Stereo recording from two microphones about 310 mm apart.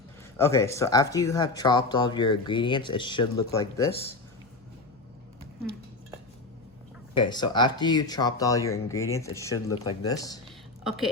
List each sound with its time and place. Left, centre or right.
0.3 s speech: centre
7.2 s speech: centre
10.8 s a woman's voice: centre